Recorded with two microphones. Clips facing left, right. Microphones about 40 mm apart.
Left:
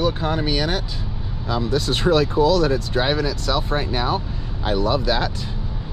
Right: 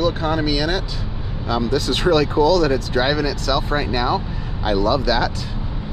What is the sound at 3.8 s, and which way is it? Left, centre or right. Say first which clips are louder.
Speech: right 2 dB; right.